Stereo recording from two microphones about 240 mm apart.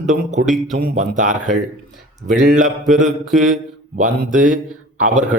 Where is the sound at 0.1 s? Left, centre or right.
Right.